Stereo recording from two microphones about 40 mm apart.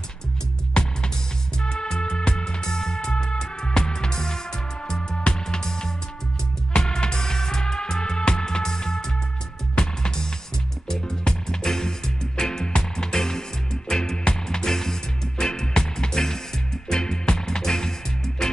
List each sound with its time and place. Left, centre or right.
0.8 s music: left